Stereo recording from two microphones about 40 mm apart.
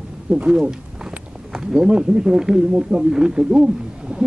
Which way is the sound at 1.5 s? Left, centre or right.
Centre.